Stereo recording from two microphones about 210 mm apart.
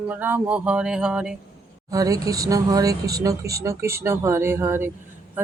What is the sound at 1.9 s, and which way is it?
Speech, 15° right (ahead or behind).